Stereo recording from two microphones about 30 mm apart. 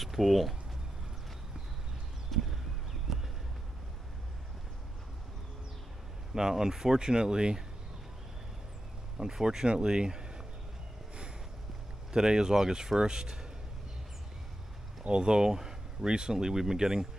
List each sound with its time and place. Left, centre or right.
0.0 s speech: centre
2.5 s a sound: centre
6.3 s speech: centre
9.4 s speech: right
12.1 s speech: right
15.0 s speech: right